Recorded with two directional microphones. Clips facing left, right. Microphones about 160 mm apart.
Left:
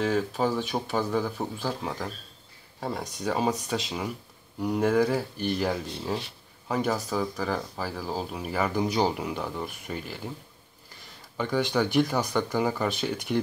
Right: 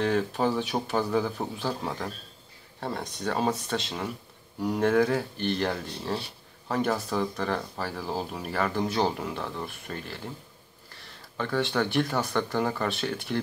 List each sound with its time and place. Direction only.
0.0 s speech: centre (ahead or behind)
11.3 s speech: 10° left (ahead or behind)